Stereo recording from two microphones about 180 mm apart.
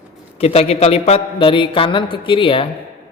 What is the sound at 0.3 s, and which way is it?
A woman's voice, 35° left (ahead or behind).